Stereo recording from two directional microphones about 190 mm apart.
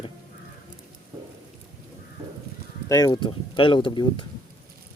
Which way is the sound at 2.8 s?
20° left (ahead or behind).